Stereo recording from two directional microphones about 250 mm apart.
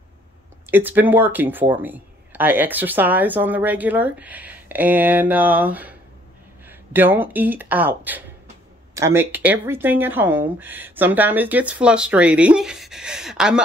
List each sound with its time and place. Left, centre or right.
0.7 s speech: centre